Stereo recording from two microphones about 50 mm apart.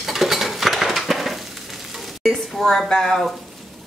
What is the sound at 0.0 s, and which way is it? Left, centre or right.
Stir, centre.